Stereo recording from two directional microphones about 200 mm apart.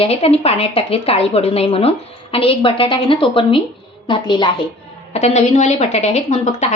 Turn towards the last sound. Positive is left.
turn(degrees=35)  # may be behind; listen again after turning